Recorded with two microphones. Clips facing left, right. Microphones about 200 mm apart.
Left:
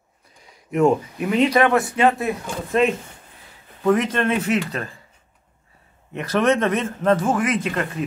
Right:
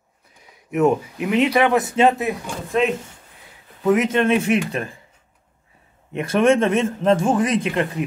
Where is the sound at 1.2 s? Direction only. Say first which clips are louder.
Even; 10° right (ahead or behind).